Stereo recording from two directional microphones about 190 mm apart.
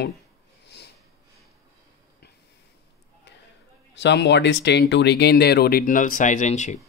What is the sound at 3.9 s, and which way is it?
Speech, 65° left (ahead or behind).